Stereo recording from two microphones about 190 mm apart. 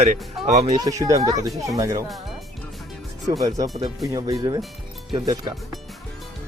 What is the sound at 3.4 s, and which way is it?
Speech, 20° right (ahead or behind).